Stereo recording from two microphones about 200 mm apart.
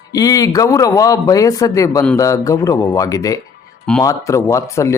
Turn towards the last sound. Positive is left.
turn(degrees=15)  # may be behind; listen again after turning